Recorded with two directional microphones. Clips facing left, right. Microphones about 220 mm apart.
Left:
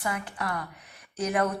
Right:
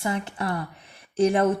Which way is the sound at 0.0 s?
25° right (ahead or behind).